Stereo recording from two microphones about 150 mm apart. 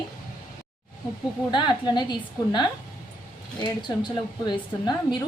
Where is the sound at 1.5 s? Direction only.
30° left (ahead or behind).